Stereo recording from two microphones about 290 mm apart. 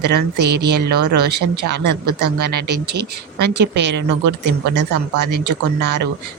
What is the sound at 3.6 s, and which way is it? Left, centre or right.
Speech, right.